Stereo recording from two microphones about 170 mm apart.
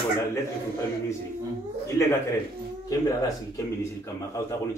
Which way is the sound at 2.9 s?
20° left (ahead or behind).